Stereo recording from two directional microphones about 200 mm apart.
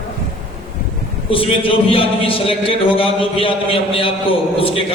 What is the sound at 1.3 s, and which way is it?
A man's voice, 25° left (ahead or behind).